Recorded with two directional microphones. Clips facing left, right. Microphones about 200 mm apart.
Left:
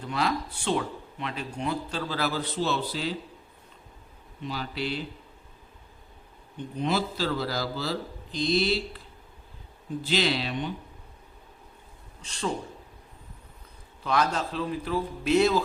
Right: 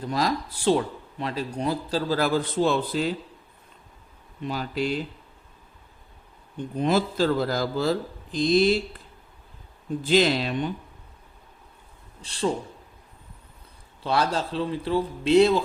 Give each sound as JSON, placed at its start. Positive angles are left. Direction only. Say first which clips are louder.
{"t": 0.1, "sound": "a man's voice", "louder": "right 2 dB", "side_deg": -40}
{"t": 4.4, "sound": "speech", "louder": "right 5 dB", "side_deg": -45}
{"t": 6.7, "sound": "speech", "louder": "right 5 dB", "side_deg": -50}
{"t": 10.1, "sound": "speech", "louder": "right 6 dB", "side_deg": -45}
{"t": 12.2, "sound": "a man's voice", "louder": "right 6 dB", "side_deg": -30}
{"t": 14.0, "sound": "a man's voice", "louder": "right 2 dB", "side_deg": -30}